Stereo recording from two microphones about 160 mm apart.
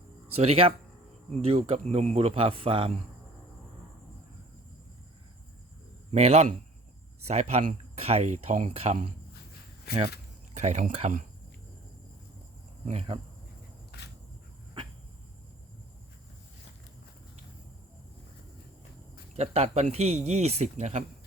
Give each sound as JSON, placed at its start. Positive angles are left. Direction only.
{"t": 0.3, "sound": "speech", "side_deg": -40}
{"t": 6.1, "sound": "a man's voice", "side_deg": -40}
{"t": 10.5, "sound": "speech", "side_deg": -45}
{"t": 12.8, "sound": "speech", "side_deg": -40}
{"t": 13.9, "sound": "insect", "side_deg": 90}
{"t": 19.4, "sound": "speech", "side_deg": -40}